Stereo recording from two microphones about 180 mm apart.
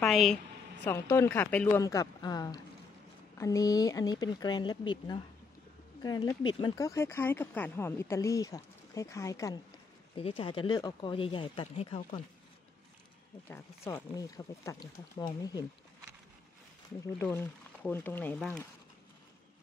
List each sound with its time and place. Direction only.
0.0 s a woman's voice: centre (ahead or behind)
0.8 s speech: 15° left (ahead or behind)
1.8 s speech: 20° left (ahead or behind)
10.1 s speech: 30° left (ahead or behind)
13.5 s speech: 15° left (ahead or behind)
17.2 s speech: 15° left (ahead or behind)